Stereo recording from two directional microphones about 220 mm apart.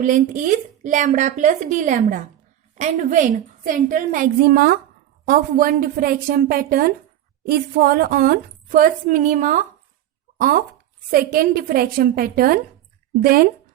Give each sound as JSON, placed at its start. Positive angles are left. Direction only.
{"t": 0.0, "sound": "speech", "side_deg": -35}